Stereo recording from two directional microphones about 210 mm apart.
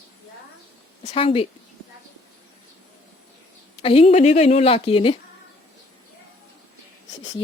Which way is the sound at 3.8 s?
25° left (ahead or behind).